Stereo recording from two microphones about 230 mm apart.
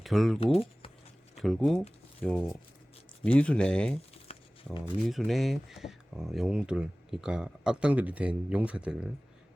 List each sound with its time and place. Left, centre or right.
0.0 s speech: centre
0.5 s speech: left
1.4 s speech: centre